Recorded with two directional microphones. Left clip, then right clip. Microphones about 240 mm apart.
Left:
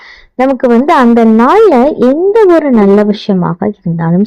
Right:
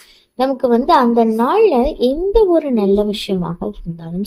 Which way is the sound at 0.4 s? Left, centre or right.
Left.